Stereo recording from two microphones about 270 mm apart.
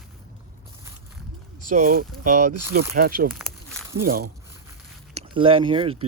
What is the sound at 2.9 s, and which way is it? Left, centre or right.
Speech, right.